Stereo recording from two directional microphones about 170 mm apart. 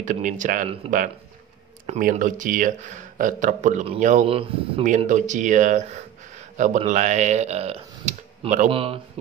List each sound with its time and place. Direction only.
0.0 s speech: 50° right (ahead or behind)
4.8 s speech: 45° right (ahead or behind)